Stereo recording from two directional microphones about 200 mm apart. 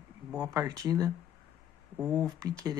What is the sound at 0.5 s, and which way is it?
Speech, 20° right (ahead or behind).